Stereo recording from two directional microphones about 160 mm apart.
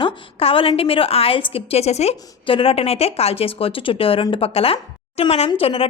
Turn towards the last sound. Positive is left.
turn(degrees=35)  # may be behind; listen again after turning